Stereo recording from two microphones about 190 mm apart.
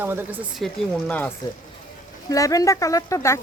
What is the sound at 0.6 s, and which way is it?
Speech, 5° left (ahead or behind).